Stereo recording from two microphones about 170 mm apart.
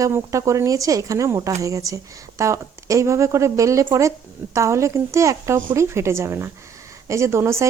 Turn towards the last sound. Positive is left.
turn(degrees=-15)  # may be behind; listen again after turning